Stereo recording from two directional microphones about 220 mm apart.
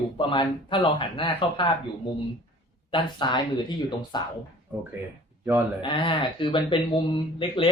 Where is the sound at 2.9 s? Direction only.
20° left (ahead or behind).